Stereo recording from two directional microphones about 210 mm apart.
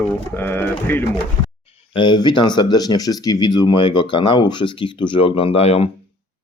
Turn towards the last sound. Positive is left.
turn(degrees=30)  # may be behind; listen again after turning